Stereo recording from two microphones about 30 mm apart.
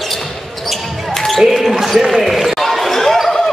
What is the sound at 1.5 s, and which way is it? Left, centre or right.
Basketball bounce, centre.